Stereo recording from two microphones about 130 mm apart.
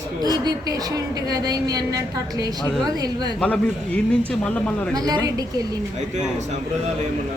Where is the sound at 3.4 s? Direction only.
10° left (ahead or behind).